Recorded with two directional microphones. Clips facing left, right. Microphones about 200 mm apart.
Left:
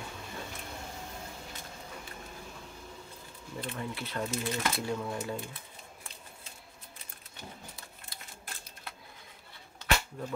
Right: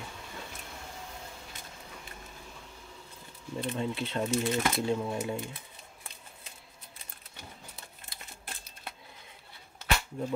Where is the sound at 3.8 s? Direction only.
25° right (ahead or behind).